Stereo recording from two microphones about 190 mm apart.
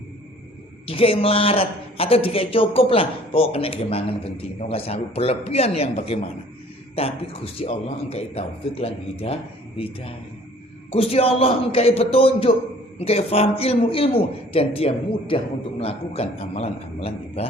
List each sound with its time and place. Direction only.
0.9 s a man's voice: 30° left (ahead or behind)